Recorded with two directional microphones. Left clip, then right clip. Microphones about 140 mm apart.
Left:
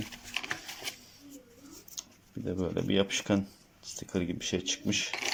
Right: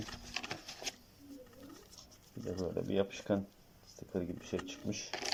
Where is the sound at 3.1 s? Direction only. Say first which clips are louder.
Left 6 dB; 15° left (ahead or behind).